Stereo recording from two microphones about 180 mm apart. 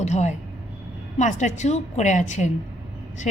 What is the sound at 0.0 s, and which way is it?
A woman's voice, 40° left (ahead or behind).